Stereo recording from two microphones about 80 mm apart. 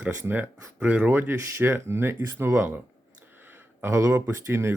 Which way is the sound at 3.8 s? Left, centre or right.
Right.